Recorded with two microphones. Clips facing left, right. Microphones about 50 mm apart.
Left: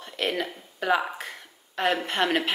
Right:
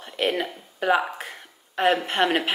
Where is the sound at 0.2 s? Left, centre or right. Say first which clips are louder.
Right 3 dB; centre.